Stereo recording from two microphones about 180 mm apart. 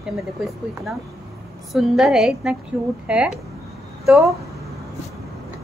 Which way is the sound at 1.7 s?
Centre (ahead or behind).